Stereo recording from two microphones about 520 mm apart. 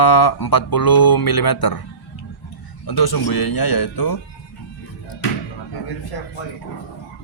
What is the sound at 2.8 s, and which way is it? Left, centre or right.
Speech, left.